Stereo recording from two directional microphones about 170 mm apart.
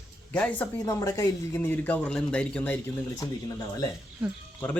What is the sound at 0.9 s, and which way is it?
Speech, 20° left (ahead or behind).